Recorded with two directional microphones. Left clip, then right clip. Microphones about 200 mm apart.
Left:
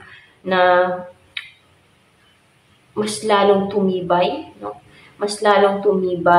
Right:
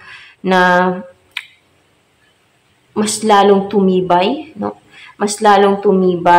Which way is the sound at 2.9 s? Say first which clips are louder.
Right 5 dB; 30° right (ahead or behind).